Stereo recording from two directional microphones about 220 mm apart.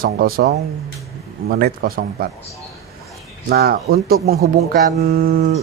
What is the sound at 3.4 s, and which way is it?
Speech, 45° right (ahead or behind).